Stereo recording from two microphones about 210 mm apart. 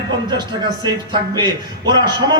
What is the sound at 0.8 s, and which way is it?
A man's voice, 20° right (ahead or behind).